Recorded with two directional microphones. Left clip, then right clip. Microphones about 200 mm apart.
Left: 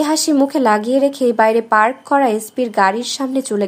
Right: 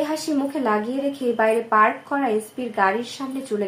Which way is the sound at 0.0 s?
55° left (ahead or behind).